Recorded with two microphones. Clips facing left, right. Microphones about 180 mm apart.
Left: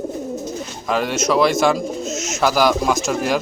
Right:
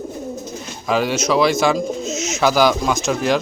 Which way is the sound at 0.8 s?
Centre (ahead or behind).